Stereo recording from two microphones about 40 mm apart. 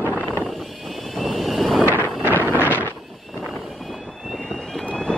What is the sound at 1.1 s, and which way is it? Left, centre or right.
Vehicle, centre.